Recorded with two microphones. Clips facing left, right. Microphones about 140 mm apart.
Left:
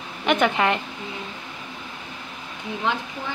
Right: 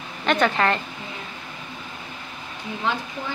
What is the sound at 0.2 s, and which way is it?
Speech, 10° left (ahead or behind).